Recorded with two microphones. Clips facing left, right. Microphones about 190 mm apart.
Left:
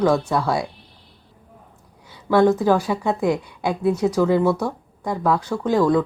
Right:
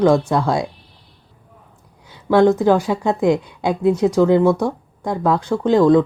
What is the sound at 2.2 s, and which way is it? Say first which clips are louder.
A woman's voice: right 3 dB; 20° right (ahead or behind).